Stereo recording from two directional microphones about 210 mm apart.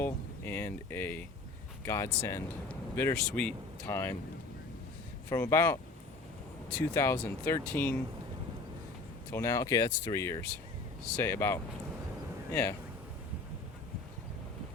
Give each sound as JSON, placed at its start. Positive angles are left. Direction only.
{"t": 0.0, "sound": "speech", "side_deg": 10}
{"t": 5.3, "sound": "speech", "side_deg": 10}
{"t": 9.3, "sound": "speech", "side_deg": 15}